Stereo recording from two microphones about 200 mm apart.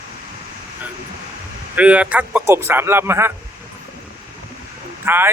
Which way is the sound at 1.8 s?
5° right (ahead or behind).